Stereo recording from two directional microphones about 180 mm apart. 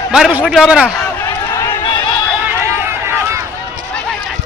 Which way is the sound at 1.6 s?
25° left (ahead or behind).